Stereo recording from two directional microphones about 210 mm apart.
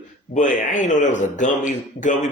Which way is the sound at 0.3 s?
35° left (ahead or behind).